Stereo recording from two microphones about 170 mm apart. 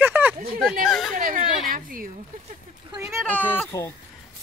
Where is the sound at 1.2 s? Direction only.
50° right (ahead or behind).